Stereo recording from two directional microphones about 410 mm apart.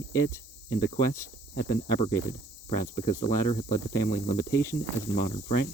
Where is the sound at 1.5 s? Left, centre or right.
Left.